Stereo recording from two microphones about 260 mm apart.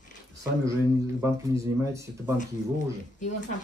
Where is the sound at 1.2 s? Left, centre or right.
Centre.